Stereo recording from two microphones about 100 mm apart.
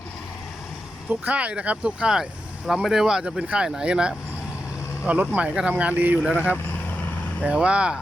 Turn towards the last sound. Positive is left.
turn(degrees=-10)  # may be behind; listen again after turning